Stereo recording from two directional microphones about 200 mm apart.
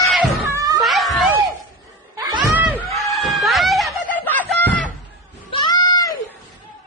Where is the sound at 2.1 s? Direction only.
20° right (ahead or behind).